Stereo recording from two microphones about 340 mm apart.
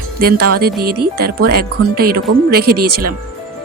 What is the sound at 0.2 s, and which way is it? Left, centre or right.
Speech, right.